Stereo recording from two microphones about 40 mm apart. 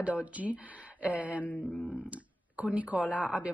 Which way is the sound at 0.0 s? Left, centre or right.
Right.